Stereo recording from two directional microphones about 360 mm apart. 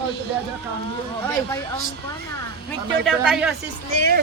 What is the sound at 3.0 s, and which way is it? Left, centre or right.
Speech, centre.